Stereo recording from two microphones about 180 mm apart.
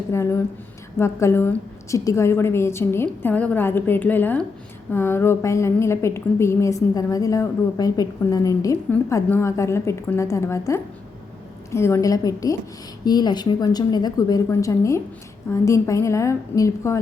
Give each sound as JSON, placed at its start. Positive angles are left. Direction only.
{"t": 0.1, "sound": "a woman's voice", "side_deg": 15}